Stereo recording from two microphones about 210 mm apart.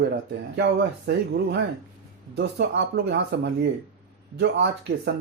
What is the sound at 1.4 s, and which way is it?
Speech, 50° right (ahead or behind).